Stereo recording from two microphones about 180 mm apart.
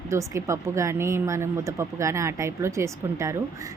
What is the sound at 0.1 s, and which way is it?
A woman's voice, 15° right (ahead or behind).